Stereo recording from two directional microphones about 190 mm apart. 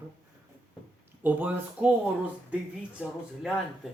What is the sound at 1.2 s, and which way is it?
Speech, 10° right (ahead or behind).